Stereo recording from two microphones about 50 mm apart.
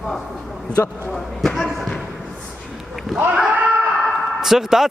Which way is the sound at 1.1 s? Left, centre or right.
Centre.